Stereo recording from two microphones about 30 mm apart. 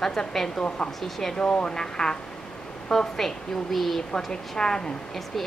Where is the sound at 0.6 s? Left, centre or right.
Left.